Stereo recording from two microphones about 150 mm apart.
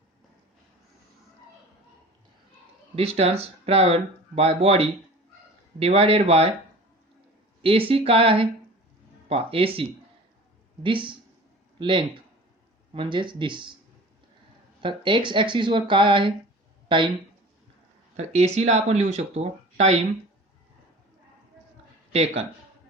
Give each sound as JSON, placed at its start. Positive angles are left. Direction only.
{"t": 2.9, "sound": "speech", "side_deg": -40}
{"t": 7.6, "sound": "speech", "side_deg": -35}
{"t": 10.8, "sound": "speech", "side_deg": -35}
{"t": 14.8, "sound": "speech", "side_deg": -35}
{"t": 18.2, "sound": "speech", "side_deg": -45}
{"t": 22.1, "sound": "speech", "side_deg": -40}